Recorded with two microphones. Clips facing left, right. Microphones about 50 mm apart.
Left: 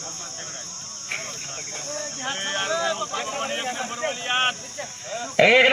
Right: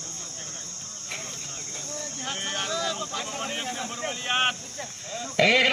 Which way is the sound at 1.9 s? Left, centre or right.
Left.